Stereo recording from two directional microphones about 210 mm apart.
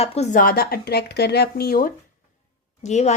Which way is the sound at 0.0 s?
30° left (ahead or behind).